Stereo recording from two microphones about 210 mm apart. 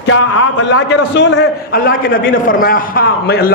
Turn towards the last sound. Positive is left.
turn(degrees=50)  # may be behind; listen again after turning